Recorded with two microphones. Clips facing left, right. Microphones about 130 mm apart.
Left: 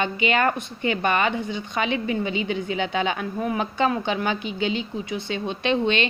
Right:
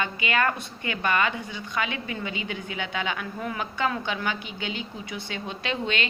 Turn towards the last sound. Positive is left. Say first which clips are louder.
# left 7 dB
turn(degrees=25)  # may be behind; listen again after turning